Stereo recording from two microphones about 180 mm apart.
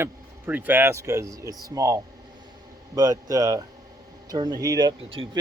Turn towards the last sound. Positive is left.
turn(degrees=-30)  # may be behind; listen again after turning